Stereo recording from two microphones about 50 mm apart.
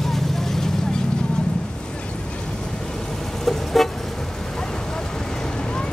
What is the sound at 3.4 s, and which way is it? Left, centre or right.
Vehicle, centre.